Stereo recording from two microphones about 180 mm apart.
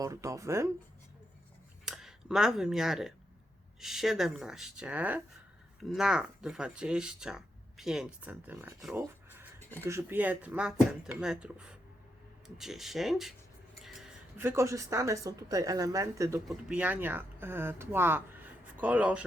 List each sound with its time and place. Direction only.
0.0 s speech: 15° right (ahead or behind)
1.8 s speech: 5° right (ahead or behind)
9.0 s a sound: 10° right (ahead or behind)
9.8 s speech: 15° right (ahead or behind)
13.8 s a sound: centre (ahead or behind)
14.3 s speech: 15° right (ahead or behind)
16.5 s speech: 5° right (ahead or behind)